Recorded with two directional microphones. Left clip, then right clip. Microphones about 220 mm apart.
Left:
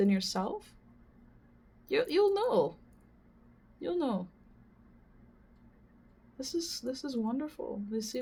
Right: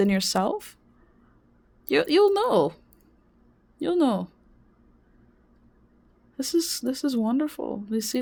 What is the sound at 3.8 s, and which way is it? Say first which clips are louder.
Speech: right 10 dB; 50° right (ahead or behind).